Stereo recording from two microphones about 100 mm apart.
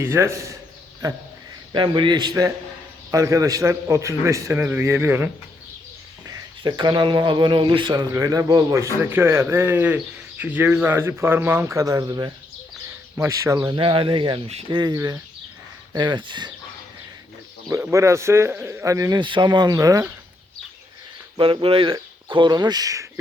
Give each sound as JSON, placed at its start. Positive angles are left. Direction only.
{"t": 0.0, "sound": "a man's voice", "side_deg": -25}
{"t": 1.7, "sound": "speech", "side_deg": -50}
{"t": 3.1, "sound": "a man's voice", "side_deg": -35}
{"t": 6.6, "sound": "speech", "side_deg": -50}
{"t": 8.1, "sound": "a man's voice", "side_deg": -35}
{"t": 12.0, "sound": "speech", "side_deg": -50}
{"t": 13.1, "sound": "speech", "side_deg": -30}
{"t": 14.7, "sound": "speech", "side_deg": -45}
{"t": 16.0, "sound": "speech", "side_deg": -50}
{"t": 17.7, "sound": "a man's voice", "side_deg": -30}
{"t": 19.2, "sound": "speech", "side_deg": -50}
{"t": 21.3, "sound": "speech", "side_deg": -60}
{"t": 21.9, "sound": "speech", "side_deg": -50}